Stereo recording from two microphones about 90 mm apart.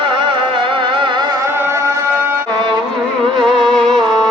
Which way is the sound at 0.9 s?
60° right (ahead or behind).